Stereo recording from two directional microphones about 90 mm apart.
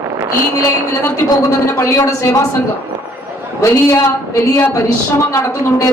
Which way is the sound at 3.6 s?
30° left (ahead or behind).